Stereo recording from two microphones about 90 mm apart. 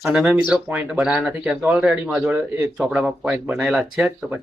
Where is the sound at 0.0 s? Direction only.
15° right (ahead or behind).